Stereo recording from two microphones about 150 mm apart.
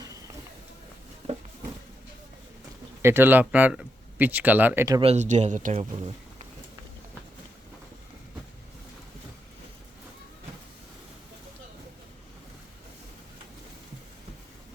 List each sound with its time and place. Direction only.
3.0 s speech: 15° right (ahead or behind)
4.9 s speech: 45° right (ahead or behind)
5.8 s speech: 35° right (ahead or behind)